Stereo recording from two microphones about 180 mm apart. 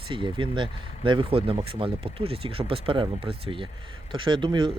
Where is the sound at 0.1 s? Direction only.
25° right (ahead or behind).